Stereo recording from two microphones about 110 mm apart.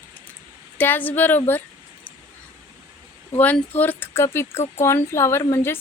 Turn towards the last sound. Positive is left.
turn(degrees=20)  # may be behind; listen again after turning